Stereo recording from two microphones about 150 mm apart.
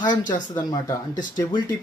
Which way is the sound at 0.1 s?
60° left (ahead or behind).